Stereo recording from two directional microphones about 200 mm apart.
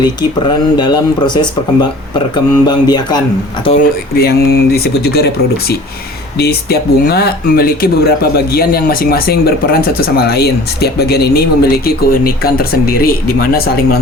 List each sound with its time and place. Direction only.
0.8 s speech: 20° left (ahead or behind)
4.1 s speech: 50° left (ahead or behind)